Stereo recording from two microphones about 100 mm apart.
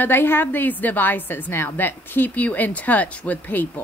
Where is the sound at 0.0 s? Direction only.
20° left (ahead or behind).